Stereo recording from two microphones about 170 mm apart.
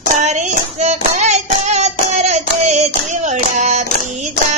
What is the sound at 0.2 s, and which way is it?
Hands, 40° right (ahead or behind).